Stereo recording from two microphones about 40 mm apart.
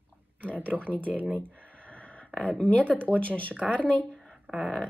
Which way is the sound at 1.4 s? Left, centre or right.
Left.